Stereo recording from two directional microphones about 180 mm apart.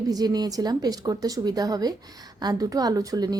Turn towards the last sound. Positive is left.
turn(degrees=-20)  # may be behind; listen again after turning